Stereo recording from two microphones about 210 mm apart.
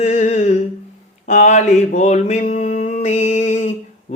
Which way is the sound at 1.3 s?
35° left (ahead or behind).